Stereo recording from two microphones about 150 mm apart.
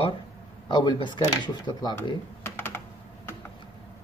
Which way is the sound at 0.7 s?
30° left (ahead or behind).